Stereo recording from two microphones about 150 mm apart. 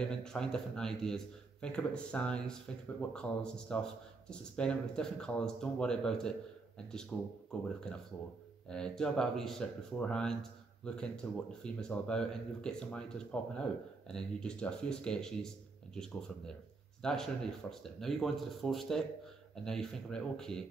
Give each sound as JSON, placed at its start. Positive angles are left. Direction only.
{"t": 0.0, "sound": "speech", "side_deg": 5}
{"t": 8.6, "sound": "speech", "side_deg": 5}